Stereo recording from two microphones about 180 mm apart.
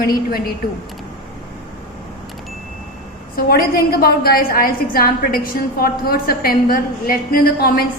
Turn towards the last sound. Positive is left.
turn(degrees=55)  # may be behind; listen again after turning